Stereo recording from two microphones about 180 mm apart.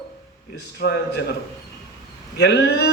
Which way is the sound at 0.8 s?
65° left (ahead or behind).